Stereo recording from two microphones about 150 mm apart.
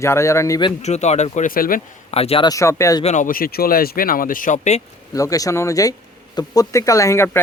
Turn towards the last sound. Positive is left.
turn(degrees=15)  # may be behind; listen again after turning